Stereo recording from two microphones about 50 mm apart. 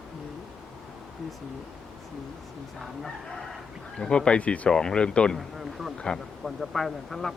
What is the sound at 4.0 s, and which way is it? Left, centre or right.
Speech, centre.